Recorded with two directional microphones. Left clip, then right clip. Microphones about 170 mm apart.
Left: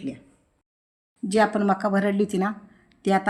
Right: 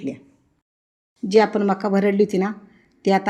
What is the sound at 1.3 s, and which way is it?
A woman's voice, 5° right (ahead or behind).